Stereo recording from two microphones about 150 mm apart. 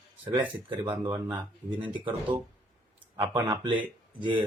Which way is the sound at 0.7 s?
30° right (ahead or behind).